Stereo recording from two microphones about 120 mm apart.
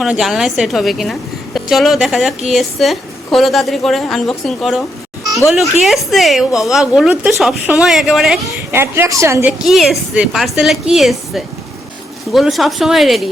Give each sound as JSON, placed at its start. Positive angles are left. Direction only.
{"t": 0.0, "sound": "a woman's voice", "side_deg": -5}
{"t": 5.8, "sound": "a woman's voice", "side_deg": 0}
{"t": 8.5, "sound": "a woman's voice", "side_deg": -20}
{"t": 9.6, "sound": "a woman's voice", "side_deg": 0}